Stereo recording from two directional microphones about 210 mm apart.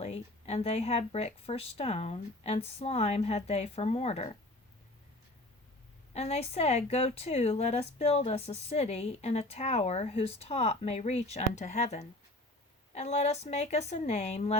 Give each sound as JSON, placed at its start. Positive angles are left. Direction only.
{"t": 0.0, "sound": "speech", "side_deg": 30}
{"t": 6.1, "sound": "a woman's voice", "side_deg": 30}